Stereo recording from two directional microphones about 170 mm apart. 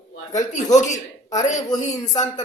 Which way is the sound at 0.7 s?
45° left (ahead or behind).